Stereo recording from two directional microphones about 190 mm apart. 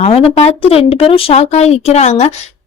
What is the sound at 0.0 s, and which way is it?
A woman's voice, 30° left (ahead or behind).